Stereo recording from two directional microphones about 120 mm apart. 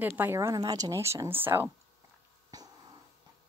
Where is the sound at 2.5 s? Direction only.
30° right (ahead or behind).